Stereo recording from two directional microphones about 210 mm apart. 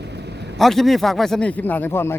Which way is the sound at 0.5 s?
Centre (ahead or behind).